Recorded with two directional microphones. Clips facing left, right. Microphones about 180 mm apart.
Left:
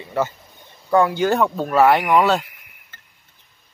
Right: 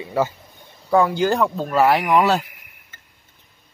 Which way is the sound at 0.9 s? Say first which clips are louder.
Even; centre (ahead or behind).